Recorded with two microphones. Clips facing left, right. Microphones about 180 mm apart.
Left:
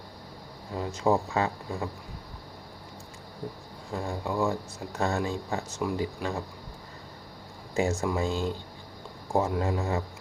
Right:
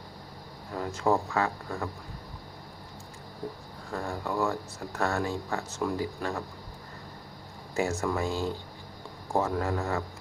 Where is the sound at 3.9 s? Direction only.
15° left (ahead or behind).